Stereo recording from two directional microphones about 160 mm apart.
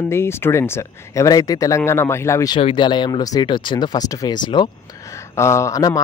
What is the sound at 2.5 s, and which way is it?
Speech, 30° left (ahead or behind).